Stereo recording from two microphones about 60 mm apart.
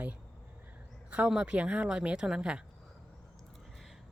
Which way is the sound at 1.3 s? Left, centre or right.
Centre.